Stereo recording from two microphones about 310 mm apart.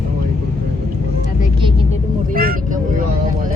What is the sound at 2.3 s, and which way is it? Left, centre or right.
Speech, right.